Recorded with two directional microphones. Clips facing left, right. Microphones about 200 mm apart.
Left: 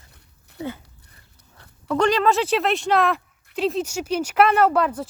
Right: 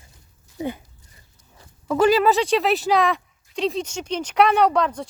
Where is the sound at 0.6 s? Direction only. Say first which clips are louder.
Right 3 dB; 15° right (ahead or behind).